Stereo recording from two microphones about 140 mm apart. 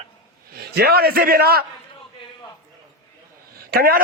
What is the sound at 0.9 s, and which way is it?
Speech, 90° right.